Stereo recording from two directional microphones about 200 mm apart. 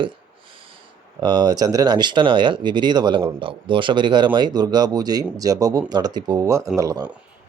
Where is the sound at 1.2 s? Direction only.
20° right (ahead or behind).